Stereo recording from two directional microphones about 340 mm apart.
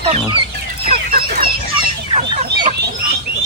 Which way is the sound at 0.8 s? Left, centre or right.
Right.